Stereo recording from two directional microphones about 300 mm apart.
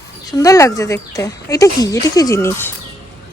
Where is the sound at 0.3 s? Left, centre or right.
Centre.